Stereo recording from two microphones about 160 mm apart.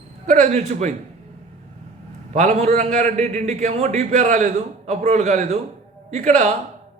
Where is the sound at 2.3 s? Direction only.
45° right (ahead or behind).